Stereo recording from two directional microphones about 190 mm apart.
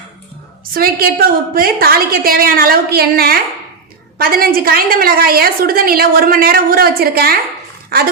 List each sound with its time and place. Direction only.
0.6 s a woman's voice: 50° right (ahead or behind)
7.9 s dog: 50° right (ahead or behind)